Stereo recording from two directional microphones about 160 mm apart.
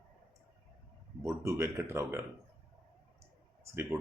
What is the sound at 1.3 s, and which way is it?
Speech, 15° right (ahead or behind).